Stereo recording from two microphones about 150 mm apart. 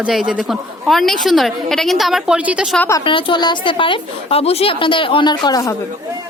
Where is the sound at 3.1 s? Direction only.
35° left (ahead or behind).